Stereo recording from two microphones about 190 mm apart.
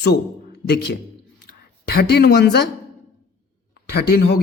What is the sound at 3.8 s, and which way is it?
Speech, 55° left (ahead or behind).